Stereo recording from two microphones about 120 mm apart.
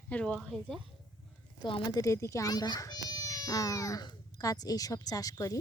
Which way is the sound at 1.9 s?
25° left (ahead or behind).